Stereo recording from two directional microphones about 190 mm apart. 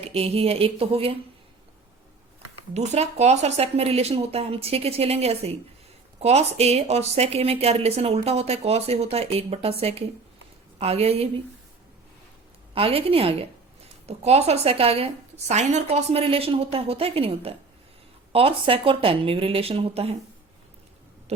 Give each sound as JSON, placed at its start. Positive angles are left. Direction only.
{"t": 0.0, "sound": "a woman's voice", "side_deg": -30}
{"t": 2.7, "sound": "a woman's voice", "side_deg": -35}
{"t": 12.7, "sound": "a woman's voice", "side_deg": -30}
{"t": 21.3, "sound": "owl", "side_deg": -35}